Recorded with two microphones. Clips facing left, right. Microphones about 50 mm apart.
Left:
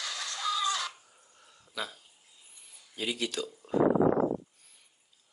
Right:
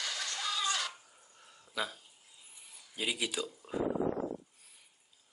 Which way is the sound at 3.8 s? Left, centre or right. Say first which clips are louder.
Left 9 dB; left.